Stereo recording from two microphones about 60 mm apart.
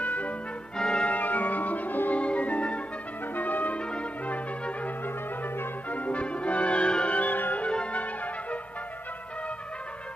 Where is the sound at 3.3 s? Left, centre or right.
Left.